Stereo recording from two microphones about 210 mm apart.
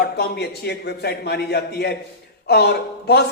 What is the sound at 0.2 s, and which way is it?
Speech, 50° left (ahead or behind).